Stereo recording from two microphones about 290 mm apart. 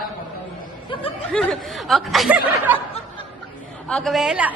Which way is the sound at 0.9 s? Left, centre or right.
Centre.